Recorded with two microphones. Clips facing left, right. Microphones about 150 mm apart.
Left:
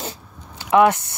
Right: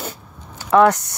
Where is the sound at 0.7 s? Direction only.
20° left (ahead or behind).